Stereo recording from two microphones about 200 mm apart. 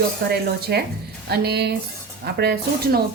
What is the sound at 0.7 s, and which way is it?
A woman's voice, 55° right (ahead or behind).